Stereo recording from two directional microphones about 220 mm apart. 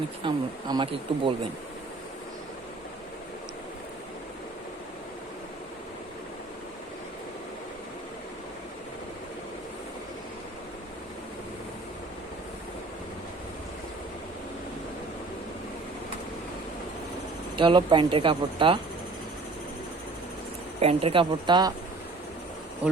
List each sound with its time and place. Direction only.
0.2 s speech: 20° right (ahead or behind)
17.6 s speech: 20° right (ahead or behind)
20.7 s speech: 25° right (ahead or behind)
22.8 s speech: 5° right (ahead or behind)